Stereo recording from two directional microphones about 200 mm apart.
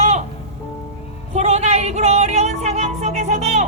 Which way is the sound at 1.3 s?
35° right (ahead or behind).